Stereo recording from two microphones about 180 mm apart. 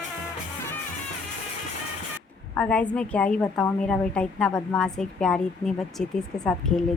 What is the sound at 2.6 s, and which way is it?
A woman's voice, 5° left (ahead or behind).